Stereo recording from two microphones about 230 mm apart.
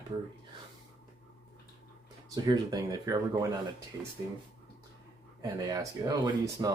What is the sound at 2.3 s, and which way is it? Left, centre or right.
Speech, centre.